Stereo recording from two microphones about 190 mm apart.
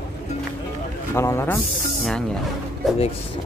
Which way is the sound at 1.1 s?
15° left (ahead or behind).